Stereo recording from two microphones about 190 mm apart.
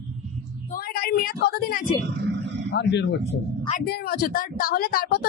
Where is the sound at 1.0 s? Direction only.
50° left (ahead or behind).